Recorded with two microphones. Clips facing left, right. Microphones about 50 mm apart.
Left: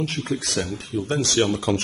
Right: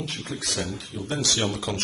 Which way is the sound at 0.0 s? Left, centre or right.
Left.